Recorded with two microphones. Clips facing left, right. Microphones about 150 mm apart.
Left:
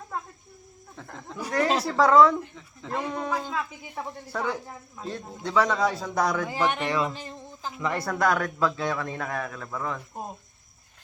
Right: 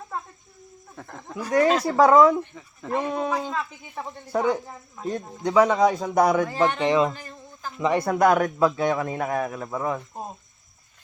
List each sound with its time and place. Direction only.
0.1 s cricket: centre (ahead or behind)
0.9 s speech: 10° right (ahead or behind)
3.5 s speech: 10° left (ahead or behind)
4.3 s a man's voice: 20° right (ahead or behind)
4.6 s speech: 5° right (ahead or behind)
5.4 s a man's voice: 15° right (ahead or behind)
7.2 s a sound: 20° left (ahead or behind)
7.8 s a man's voice: 20° right (ahead or behind)